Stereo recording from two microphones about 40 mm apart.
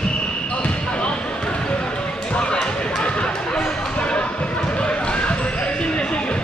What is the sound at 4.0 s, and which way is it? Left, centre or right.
Basketball bounce, left.